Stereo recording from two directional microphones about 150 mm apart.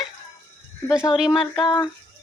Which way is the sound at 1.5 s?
25° left (ahead or behind).